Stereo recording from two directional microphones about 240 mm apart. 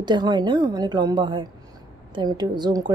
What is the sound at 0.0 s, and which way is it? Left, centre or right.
A woman's voice, centre.